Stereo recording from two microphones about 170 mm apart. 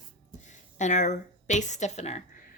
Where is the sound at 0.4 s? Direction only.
45° left (ahead or behind).